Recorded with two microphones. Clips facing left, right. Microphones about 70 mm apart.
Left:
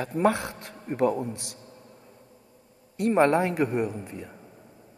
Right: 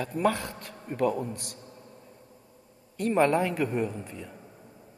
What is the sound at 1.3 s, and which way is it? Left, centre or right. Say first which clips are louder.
Speech: even; right.